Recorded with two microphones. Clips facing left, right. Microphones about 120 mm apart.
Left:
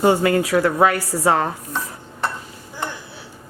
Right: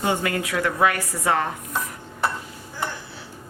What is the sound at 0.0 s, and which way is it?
Speech, 35° left (ahead or behind).